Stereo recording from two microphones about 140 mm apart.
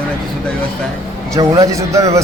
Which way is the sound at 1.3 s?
25° right (ahead or behind).